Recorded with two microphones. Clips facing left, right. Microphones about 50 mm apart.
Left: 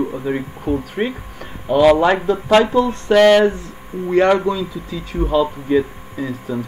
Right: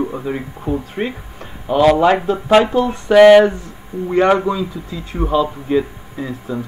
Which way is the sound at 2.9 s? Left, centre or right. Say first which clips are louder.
Right 6 dB; centre.